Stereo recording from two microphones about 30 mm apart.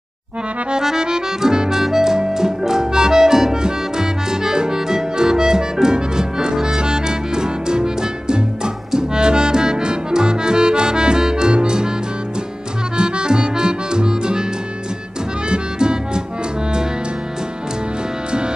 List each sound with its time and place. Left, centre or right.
0.8 s music: right
12.9 s music: right
15.5 s music: right